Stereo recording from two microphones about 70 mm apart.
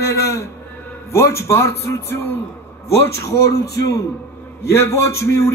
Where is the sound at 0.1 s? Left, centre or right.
Left.